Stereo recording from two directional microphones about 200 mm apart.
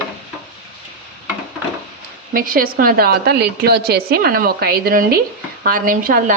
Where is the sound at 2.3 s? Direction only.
45° right (ahead or behind).